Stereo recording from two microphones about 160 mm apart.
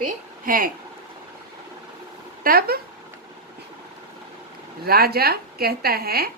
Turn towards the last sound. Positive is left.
turn(degrees=-75)  # may be behind; listen again after turning